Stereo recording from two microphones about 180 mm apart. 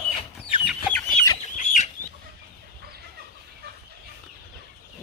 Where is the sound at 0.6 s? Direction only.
5° right (ahead or behind).